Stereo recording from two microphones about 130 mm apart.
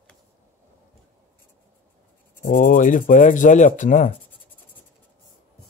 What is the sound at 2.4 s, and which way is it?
Speech, 90° left.